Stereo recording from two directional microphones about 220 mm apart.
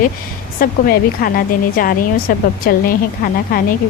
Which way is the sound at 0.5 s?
40° left (ahead or behind).